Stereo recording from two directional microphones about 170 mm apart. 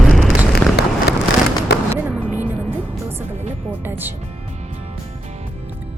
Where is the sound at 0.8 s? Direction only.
75° left (ahead or behind).